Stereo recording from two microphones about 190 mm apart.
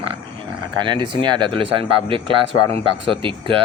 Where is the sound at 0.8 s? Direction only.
25° right (ahead or behind).